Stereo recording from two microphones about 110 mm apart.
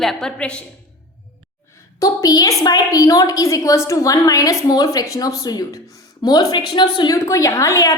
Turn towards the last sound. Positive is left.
turn(degrees=30)  # may be behind; listen again after turning